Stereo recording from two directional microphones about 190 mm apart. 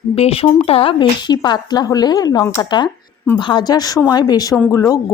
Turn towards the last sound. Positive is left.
turn(degrees=15)  # may be behind; listen again after turning